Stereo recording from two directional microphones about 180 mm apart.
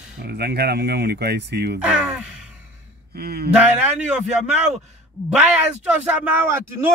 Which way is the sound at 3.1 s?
60° right (ahead or behind).